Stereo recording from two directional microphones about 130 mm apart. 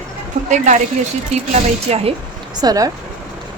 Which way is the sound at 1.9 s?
55° right (ahead or behind).